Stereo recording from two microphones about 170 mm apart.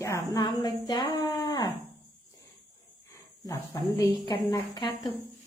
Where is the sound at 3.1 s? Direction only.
15° left (ahead or behind).